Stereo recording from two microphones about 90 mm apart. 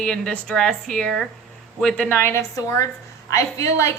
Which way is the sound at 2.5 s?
35° left (ahead or behind).